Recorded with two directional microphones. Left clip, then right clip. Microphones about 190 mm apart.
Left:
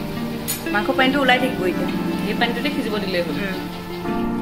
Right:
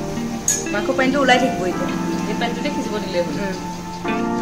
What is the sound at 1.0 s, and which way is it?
Speech, 20° right (ahead or behind).